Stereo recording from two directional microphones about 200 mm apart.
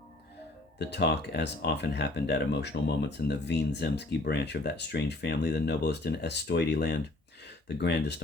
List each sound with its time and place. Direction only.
0.8 s speech: 55° left (ahead or behind)